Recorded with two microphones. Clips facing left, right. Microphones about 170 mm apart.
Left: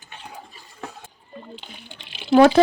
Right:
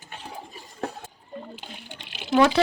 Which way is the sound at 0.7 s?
40° right (ahead or behind).